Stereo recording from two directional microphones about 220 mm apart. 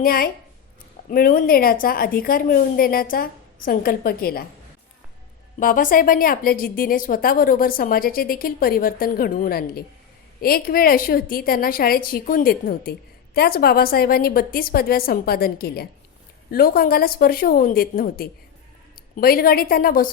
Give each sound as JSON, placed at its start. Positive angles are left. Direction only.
{"t": 0.0, "sound": "a woman's voice", "side_deg": 40}
{"t": 5.5, "sound": "a woman's voice", "side_deg": 40}